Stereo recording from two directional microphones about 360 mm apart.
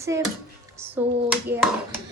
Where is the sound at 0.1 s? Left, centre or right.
Centre.